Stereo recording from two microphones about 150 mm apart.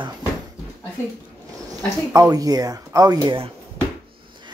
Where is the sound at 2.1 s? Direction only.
25° right (ahead or behind).